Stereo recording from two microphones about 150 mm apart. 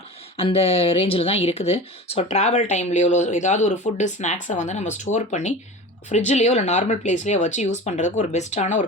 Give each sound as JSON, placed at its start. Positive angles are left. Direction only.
{"t": 0.3, "sound": "speech", "side_deg": 40}